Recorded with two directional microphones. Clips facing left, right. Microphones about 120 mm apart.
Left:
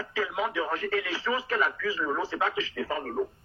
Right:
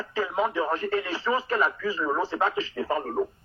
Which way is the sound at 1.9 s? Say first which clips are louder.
Right 3 dB; 50° right (ahead or behind).